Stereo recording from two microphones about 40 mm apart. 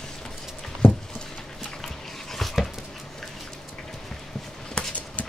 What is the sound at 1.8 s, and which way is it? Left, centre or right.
Dog, centre.